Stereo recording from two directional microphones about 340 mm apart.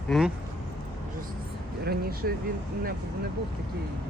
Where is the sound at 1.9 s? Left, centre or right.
Right.